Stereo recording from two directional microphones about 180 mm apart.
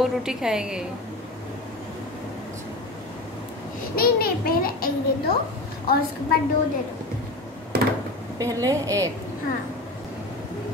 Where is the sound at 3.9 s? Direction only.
55° left (ahead or behind).